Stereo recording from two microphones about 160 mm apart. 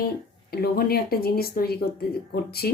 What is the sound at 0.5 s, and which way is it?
A woman's voice, 75° left (ahead or behind).